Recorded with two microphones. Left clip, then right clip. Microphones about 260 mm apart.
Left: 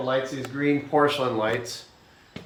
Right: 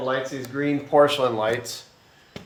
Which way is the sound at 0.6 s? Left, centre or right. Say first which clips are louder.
Right 3 dB; right.